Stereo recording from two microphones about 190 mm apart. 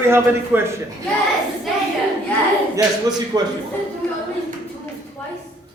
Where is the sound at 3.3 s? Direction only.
20° right (ahead or behind).